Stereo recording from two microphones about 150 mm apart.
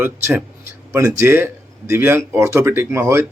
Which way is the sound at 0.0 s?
10° right (ahead or behind).